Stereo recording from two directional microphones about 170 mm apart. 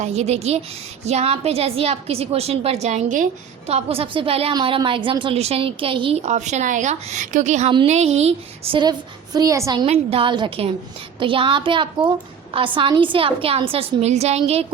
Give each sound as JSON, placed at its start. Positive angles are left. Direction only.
{"t": 0.0, "sound": "a woman's voice", "side_deg": -40}
{"t": 8.8, "sound": "a woman's voice", "side_deg": -25}
{"t": 9.8, "sound": "a woman's voice", "side_deg": -35}